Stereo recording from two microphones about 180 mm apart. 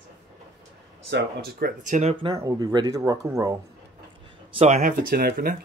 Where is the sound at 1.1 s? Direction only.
60° right (ahead or behind); by 2.1 s 40° right (ahead or behind).